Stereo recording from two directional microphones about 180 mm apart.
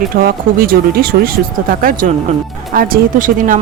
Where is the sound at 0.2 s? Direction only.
55° right (ahead or behind).